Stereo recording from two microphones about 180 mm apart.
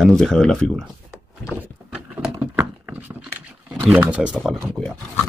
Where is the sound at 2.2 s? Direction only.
5° right (ahead or behind).